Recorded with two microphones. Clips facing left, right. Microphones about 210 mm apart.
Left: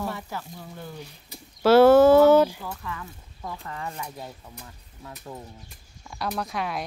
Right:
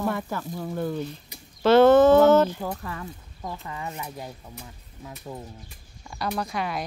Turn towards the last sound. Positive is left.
turn(degrees=0)  # may be behind; listen again after turning